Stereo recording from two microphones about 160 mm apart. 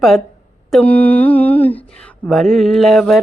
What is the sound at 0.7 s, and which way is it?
Mantra, 10° left (ahead or behind).